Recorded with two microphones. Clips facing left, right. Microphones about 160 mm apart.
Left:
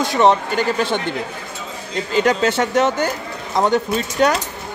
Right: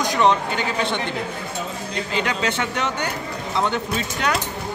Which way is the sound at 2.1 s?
40° left (ahead or behind).